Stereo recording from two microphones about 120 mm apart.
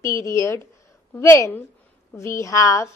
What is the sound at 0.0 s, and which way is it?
A woman's voice, 25° left (ahead or behind).